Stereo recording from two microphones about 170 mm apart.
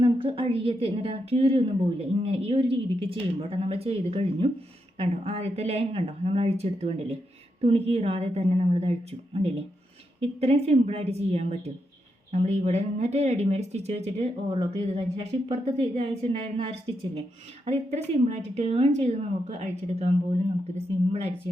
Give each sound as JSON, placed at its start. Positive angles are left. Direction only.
{"t": 0.0, "sound": "a woman's voice", "side_deg": -35}